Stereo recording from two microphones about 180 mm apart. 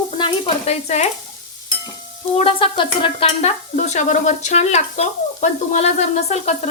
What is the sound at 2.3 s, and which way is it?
Speech, 30° left (ahead or behind).